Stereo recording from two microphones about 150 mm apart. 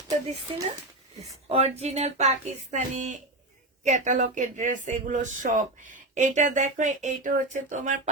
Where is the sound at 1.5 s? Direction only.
45° right (ahead or behind).